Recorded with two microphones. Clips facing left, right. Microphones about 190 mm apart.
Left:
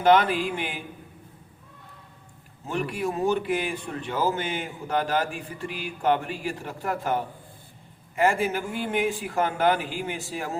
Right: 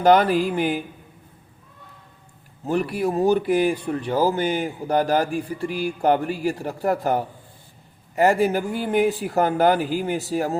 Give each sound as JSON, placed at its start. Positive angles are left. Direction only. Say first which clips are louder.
{"t": 0.0, "sound": "speech", "louder": "right 4 dB", "side_deg": -40}
{"t": 2.6, "sound": "speech", "louder": "right 6 dB", "side_deg": -35}